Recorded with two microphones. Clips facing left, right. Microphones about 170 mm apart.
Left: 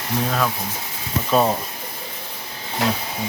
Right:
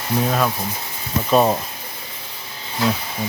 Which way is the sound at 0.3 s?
10° right (ahead or behind).